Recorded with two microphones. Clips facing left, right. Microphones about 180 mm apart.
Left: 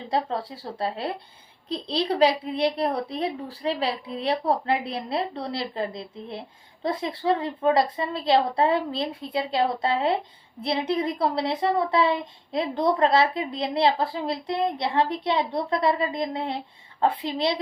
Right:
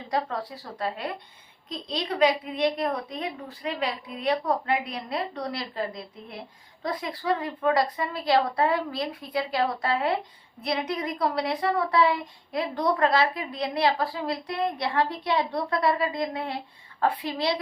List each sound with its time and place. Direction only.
0.1 s a woman's voice: 25° left (ahead or behind)